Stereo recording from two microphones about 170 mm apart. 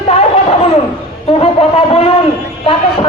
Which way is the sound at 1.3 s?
35° left (ahead or behind).